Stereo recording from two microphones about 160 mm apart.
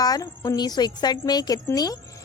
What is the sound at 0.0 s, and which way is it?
Speech, 25° left (ahead or behind).